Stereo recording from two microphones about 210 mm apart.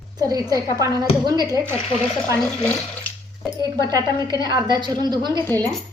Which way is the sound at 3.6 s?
20° right (ahead or behind).